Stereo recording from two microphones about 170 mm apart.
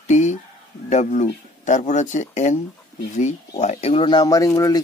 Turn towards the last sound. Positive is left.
turn(degrees=20)  # may be behind; listen again after turning